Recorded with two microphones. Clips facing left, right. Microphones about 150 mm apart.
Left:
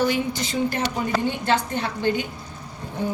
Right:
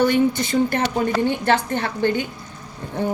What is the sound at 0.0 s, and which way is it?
Speech, 55° right (ahead or behind).